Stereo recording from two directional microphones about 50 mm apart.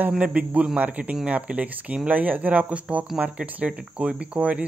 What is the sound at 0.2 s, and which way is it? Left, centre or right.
Speech, right.